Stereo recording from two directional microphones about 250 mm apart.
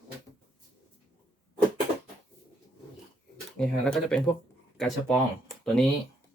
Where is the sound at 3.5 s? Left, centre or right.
Centre.